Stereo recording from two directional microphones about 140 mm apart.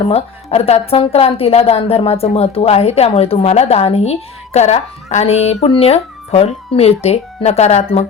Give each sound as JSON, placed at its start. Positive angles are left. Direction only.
{"t": 0.1, "sound": "a woman's voice", "side_deg": 45}